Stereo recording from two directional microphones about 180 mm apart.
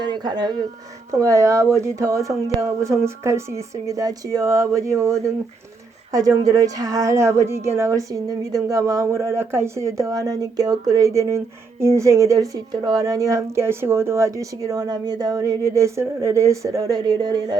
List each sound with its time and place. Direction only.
0.0 s speech: 25° right (ahead or behind)